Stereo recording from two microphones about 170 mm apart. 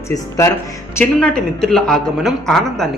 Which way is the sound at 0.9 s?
5° left (ahead or behind).